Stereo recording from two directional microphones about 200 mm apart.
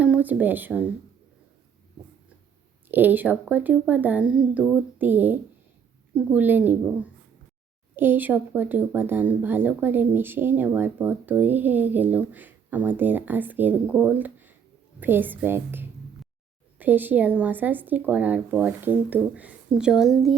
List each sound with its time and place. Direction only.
0.0 s speech: 5° right (ahead or behind)
2.9 s speech: 10° right (ahead or behind)